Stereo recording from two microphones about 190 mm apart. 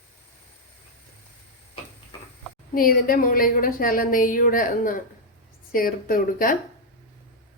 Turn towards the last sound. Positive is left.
turn(degrees=50)  # may be behind; listen again after turning